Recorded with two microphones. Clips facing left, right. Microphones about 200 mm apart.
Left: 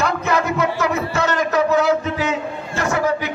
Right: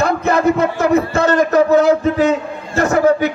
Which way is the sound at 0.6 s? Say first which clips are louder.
Right 6 dB; 50° right (ahead or behind).